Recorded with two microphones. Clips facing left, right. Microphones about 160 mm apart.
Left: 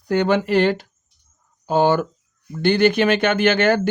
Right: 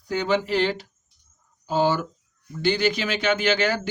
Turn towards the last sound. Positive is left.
turn(degrees=55)  # may be behind; listen again after turning